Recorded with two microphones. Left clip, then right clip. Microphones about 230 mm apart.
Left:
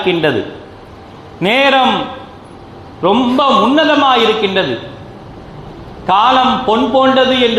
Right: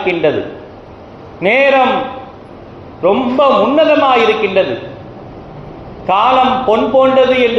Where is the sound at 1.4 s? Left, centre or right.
Left.